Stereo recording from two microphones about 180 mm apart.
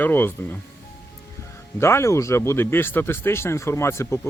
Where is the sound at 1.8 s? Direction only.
15° left (ahead or behind).